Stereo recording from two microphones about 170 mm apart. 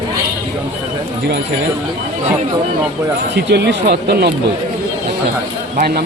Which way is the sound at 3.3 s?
85° right.